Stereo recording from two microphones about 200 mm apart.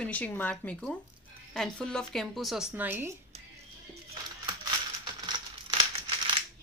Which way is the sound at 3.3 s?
30° right (ahead or behind).